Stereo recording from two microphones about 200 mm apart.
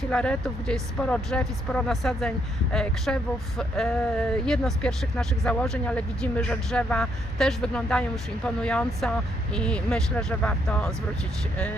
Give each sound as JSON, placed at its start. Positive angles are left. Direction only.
{"t": 0.1, "sound": "speech", "side_deg": 5}